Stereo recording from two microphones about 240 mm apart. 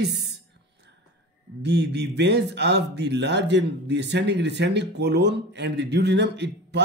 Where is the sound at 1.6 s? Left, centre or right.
Right.